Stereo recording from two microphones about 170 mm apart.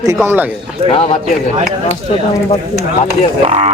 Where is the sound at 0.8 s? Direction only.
35° left (ahead or behind).